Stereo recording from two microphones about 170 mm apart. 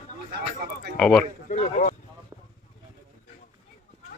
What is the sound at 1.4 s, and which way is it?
Speech, 45° left (ahead or behind).